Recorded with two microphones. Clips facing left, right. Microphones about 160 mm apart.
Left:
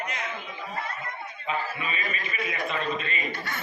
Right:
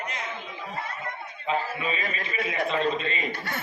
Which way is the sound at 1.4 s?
30° right (ahead or behind).